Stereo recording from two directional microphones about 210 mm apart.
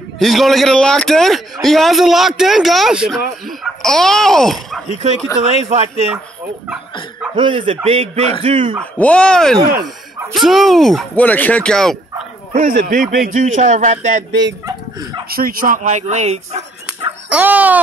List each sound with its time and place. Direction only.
0.2 s a man's voice: centre (ahead or behind)
4.8 s speech: 35° right (ahead or behind)
7.3 s a man's voice: 25° right (ahead or behind)
8.9 s a man's voice: 5° left (ahead or behind)
12.5 s speech: 40° right (ahead or behind)
15.2 s speech: 45° right (ahead or behind)
17.3 s a sound: 5° right (ahead or behind)